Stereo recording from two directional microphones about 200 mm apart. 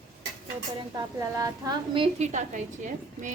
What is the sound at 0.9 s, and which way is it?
A woman's voice, 15° right (ahead or behind).